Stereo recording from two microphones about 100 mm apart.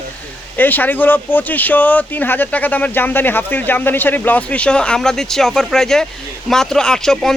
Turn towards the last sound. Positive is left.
turn(degrees=5)  # may be behind; listen again after turning